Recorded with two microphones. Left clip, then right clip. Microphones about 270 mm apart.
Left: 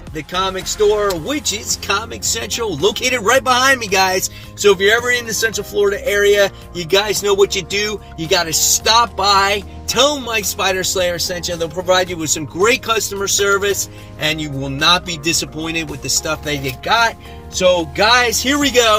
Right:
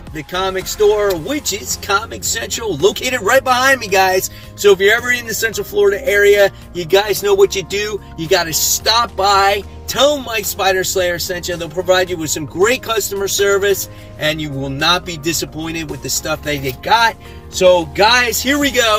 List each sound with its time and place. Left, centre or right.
0.3 s speech: centre